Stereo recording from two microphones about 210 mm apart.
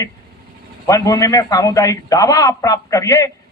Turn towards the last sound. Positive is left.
turn(degrees=15)  # may be behind; listen again after turning